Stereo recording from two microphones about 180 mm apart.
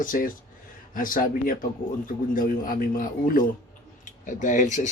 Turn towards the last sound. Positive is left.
turn(degrees=45)  # may be behind; listen again after turning